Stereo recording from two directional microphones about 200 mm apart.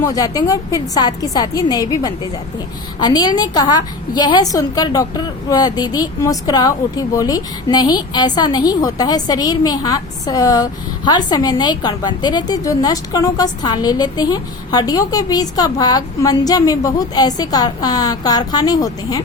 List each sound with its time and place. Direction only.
0.0 s a woman's voice: 20° left (ahead or behind)